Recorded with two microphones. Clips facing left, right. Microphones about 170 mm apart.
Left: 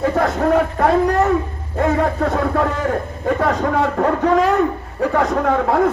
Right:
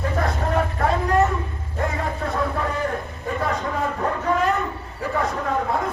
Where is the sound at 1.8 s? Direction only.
70° left (ahead or behind).